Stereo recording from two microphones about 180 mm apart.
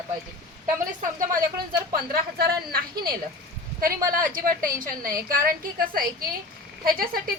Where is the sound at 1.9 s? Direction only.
55° right (ahead or behind).